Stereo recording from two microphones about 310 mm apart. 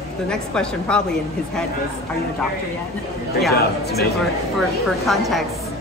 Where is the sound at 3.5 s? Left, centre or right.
Left.